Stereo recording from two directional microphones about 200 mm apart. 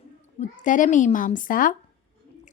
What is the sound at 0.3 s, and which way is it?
A woman's voice, 40° left (ahead or behind).